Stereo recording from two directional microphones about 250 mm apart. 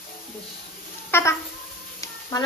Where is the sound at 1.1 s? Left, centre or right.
Centre.